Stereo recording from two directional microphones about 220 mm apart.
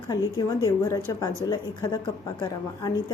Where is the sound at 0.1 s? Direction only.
15° left (ahead or behind).